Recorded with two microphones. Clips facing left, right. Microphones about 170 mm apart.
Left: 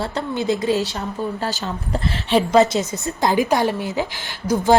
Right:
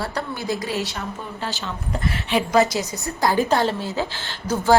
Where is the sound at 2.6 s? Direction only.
20° left (ahead or behind).